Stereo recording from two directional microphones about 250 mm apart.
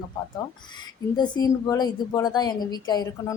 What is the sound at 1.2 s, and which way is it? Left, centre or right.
A woman's voice, centre.